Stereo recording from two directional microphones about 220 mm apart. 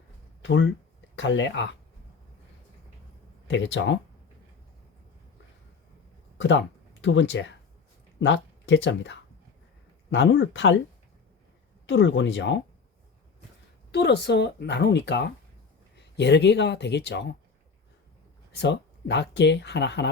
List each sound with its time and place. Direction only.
0.4 s speech: 55° left (ahead or behind)
3.4 s speech: 55° left (ahead or behind)
6.3 s speech: 55° left (ahead or behind)
11.9 s speech: 55° left (ahead or behind)
13.9 s speech: 50° left (ahead or behind)
18.5 s speech: 50° left (ahead or behind)